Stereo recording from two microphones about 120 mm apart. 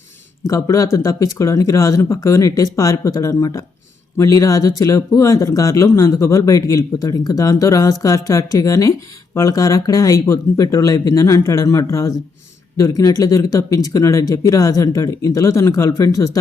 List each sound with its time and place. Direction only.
0.4 s speech: 25° left (ahead or behind)